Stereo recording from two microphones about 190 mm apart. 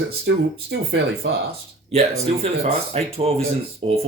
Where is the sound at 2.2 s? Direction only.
30° right (ahead or behind).